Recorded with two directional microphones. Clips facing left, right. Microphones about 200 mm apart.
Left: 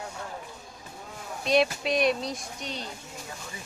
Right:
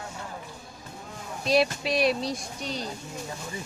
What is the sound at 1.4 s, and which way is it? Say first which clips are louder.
Speech: even; centre (ahead or behind).